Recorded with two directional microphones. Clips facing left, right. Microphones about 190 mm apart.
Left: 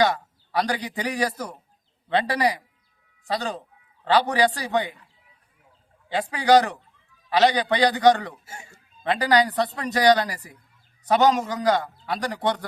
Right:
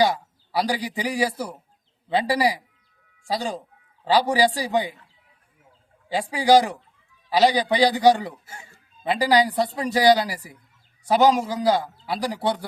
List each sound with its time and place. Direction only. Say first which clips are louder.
0.0 s a man's voice: right 1 dB; 10° right (ahead or behind)
6.1 s a man's voice: right 1 dB; 10° right (ahead or behind)
8.4 s a sound: left 1 dB; 25° left (ahead or behind)
9.0 s a man's voice: right 1 dB; 10° right (ahead or behind)